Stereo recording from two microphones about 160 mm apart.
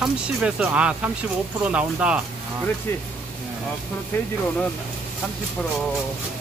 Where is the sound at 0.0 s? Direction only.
5° right (ahead or behind).